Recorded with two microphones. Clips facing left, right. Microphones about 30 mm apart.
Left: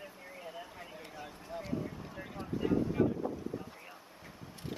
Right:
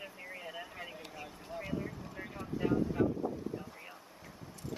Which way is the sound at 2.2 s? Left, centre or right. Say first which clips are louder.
Even; centre.